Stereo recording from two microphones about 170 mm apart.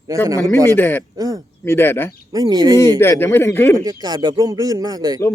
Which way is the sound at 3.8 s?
25° right (ahead or behind).